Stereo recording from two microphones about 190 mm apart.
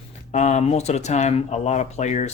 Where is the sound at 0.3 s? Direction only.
40° left (ahead or behind).